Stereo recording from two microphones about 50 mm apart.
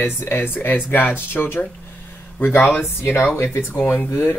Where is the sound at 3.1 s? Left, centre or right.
Left.